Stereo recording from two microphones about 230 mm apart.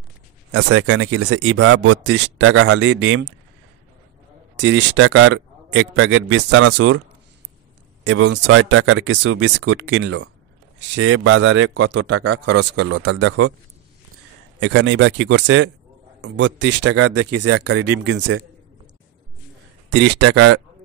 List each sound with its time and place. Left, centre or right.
0.5 s speech: right
4.6 s speech: right
8.0 s speech: right
14.6 s speech: right
19.9 s speech: right